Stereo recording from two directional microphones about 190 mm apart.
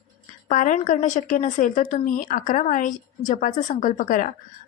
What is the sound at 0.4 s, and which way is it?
A woman's voice, 45° left (ahead or behind).